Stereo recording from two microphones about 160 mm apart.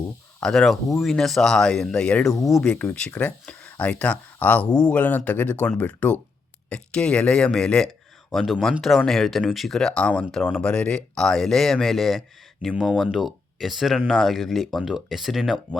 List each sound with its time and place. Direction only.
0.3 s speech: 5° left (ahead or behind)